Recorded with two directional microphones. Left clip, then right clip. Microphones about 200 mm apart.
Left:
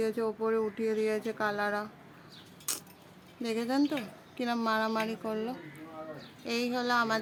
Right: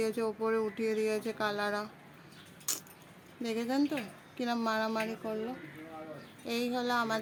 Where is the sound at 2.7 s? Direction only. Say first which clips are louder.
Even; centre (ahead or behind).